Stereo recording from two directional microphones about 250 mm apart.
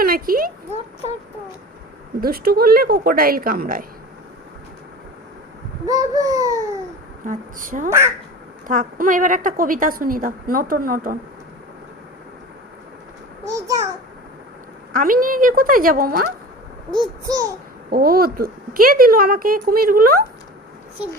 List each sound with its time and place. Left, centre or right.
0.0 s a sound: right
2.2 s a woman's voice: right
5.8 s speech: centre
7.3 s a woman's voice: right
7.9 s a child's voice: centre
8.6 s a woman's voice: right
14.9 s a woman's voice: right
16.9 s a child's voice: centre
17.9 s a woman's voice: right